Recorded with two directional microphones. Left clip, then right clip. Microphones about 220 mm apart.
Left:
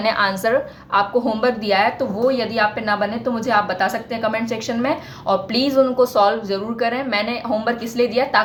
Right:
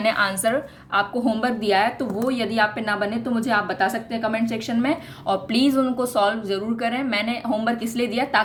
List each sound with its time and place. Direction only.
0.0 s a woman's voice: 25° right (ahead or behind)